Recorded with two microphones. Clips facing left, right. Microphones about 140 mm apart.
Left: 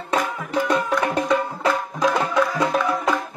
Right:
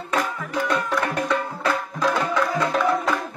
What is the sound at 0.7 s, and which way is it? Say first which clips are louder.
Music: left 3 dB; 20° left (ahead or behind).